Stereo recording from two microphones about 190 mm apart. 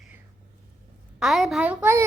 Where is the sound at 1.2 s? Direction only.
Centre (ahead or behind).